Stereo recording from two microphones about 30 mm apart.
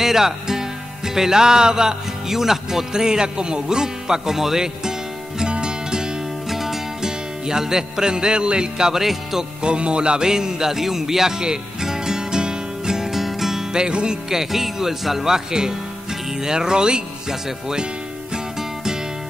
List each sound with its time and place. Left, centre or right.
0.0 s music: centre
4.4 s speech: centre
5.4 s music: right
6.5 s music: centre
7.0 s music: right
9.0 s speech: centre
9.6 s music: right
10.2 s music: right
13.1 s music: centre
13.7 s music: right
14.3 s speech: centre; by 17.0 s right